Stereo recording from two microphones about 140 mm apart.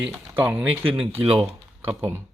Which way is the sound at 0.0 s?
10° right (ahead or behind).